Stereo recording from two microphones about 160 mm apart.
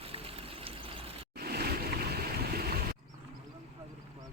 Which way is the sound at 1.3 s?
75° right (ahead or behind).